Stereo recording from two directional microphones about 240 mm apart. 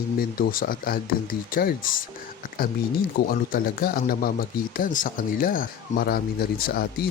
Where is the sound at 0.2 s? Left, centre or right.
Left.